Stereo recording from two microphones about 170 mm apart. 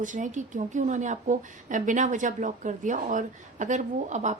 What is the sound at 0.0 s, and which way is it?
A woman's voice, 50° right (ahead or behind).